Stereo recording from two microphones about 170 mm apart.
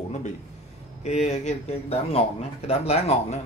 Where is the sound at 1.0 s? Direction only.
40° left (ahead or behind).